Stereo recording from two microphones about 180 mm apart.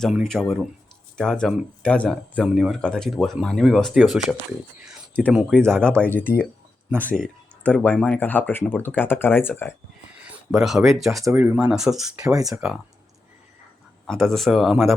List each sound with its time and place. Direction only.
0.0 s speech: centre (ahead or behind)
7.2 s speech: 5° left (ahead or behind)
10.2 s speech: 5° right (ahead or behind)
11.2 s speech: 10° right (ahead or behind)
12.2 s speech: 20° right (ahead or behind)
12.5 s speech: 5° right (ahead or behind)
14.1 s speech: centre (ahead or behind)